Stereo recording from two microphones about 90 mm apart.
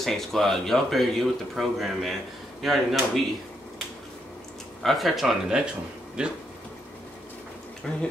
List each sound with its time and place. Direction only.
0.0 s speech: 5° left (ahead or behind)
4.8 s speech: centre (ahead or behind)
7.9 s speech: 10° left (ahead or behind)